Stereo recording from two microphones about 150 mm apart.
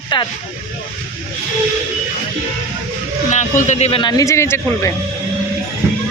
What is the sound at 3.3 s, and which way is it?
Speech, 50° left (ahead or behind).